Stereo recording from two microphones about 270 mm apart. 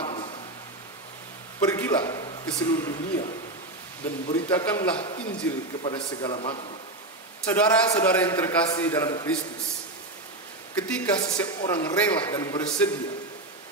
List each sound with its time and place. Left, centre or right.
0.0 s a sound: centre
1.7 s a man's voice: centre
4.3 s a man's voice: centre
5.8 s a man's voice: centre
7.4 s a man's voice: centre
10.7 s a man's voice: centre